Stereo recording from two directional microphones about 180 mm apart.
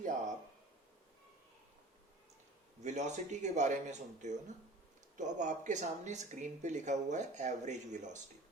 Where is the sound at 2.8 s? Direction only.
40° right (ahead or behind).